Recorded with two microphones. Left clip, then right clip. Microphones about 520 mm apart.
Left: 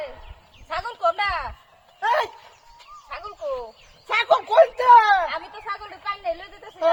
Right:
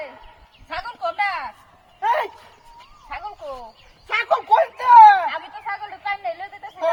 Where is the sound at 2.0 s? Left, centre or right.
Centre.